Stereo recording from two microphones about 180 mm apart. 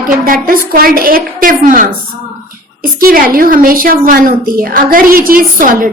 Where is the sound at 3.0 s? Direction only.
50° right (ahead or behind).